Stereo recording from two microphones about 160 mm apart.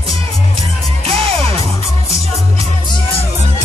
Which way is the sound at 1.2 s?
40° right (ahead or behind).